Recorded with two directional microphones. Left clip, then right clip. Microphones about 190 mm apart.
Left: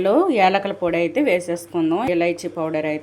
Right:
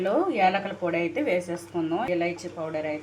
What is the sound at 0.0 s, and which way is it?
A woman's voice, 55° left (ahead or behind).